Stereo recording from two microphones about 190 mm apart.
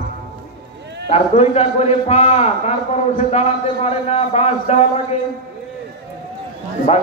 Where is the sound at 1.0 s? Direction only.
35° left (ahead or behind).